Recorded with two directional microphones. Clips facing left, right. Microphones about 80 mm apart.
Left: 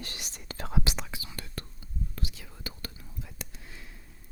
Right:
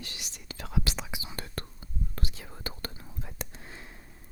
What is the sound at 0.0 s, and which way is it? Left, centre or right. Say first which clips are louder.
Whispering: left 2 dB; left.